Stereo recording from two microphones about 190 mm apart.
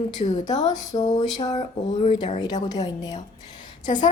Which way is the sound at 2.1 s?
35° left (ahead or behind).